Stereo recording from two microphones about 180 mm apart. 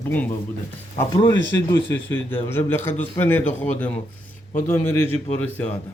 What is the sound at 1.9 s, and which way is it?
A man's voice, 10° left (ahead or behind).